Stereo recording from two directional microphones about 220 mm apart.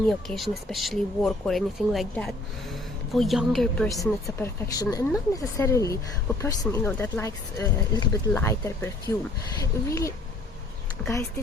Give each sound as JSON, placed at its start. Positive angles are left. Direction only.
{"t": 0.1, "sound": "speech", "side_deg": 0}
{"t": 4.0, "sound": "speech", "side_deg": 10}